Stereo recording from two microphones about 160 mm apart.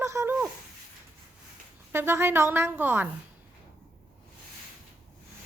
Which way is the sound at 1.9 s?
15° right (ahead or behind).